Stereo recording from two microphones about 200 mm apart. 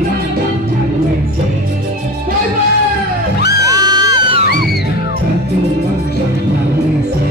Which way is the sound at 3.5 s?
15° right (ahead or behind).